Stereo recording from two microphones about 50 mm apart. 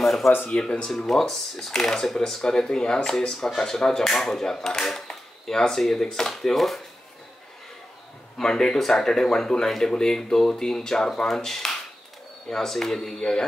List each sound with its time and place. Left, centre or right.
0.0 s a sound: centre
0.5 s speech: centre
0.9 s speech: centre
8.4 s speech: centre